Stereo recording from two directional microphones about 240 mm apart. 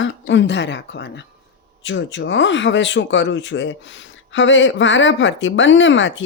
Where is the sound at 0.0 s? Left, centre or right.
Left.